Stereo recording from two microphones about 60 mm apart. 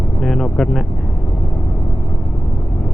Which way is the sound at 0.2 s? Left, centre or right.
Centre.